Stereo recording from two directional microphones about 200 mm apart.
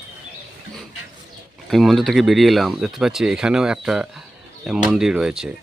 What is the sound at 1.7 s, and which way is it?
Speech, centre (ahead or behind).